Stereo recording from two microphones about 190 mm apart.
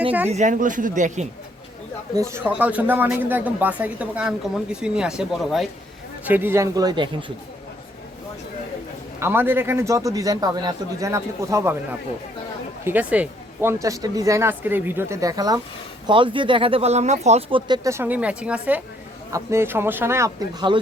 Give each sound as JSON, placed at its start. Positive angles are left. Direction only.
{"t": 0.3, "sound": "speech", "side_deg": -40}
{"t": 2.1, "sound": "speech", "side_deg": -15}
{"t": 9.2, "sound": "speech", "side_deg": -10}
{"t": 17.7, "sound": "speech", "side_deg": -15}